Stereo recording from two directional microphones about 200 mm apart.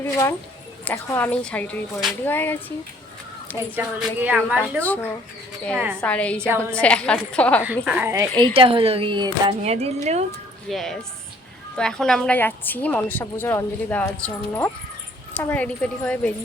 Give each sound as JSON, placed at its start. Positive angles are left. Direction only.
{"t": 0.0, "sound": "a woman's voice", "side_deg": 10}
{"t": 3.8, "sound": "a woman's voice", "side_deg": -10}
{"t": 4.8, "sound": "a woman's voice", "side_deg": 10}
{"t": 5.7, "sound": "a woman's voice", "side_deg": -10}
{"t": 6.0, "sound": "a woman's voice", "side_deg": 5}
{"t": 7.9, "sound": "a woman's voice", "side_deg": -10}
{"t": 8.5, "sound": "speech", "side_deg": -25}
{"t": 10.7, "sound": "a woman's voice", "side_deg": 0}